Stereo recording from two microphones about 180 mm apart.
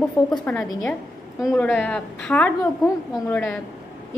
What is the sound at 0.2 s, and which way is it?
A woman's voice, 10° left (ahead or behind).